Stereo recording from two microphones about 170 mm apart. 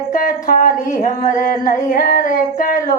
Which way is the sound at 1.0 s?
55° left (ahead or behind).